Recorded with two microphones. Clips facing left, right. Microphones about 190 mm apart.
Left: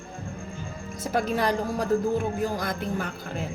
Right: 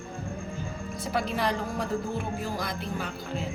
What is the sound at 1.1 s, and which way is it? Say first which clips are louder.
Music: left 4 dB; 45° left (ahead or behind).